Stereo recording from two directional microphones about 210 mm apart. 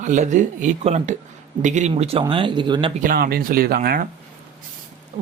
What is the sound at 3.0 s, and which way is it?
Speech, 45° right (ahead or behind).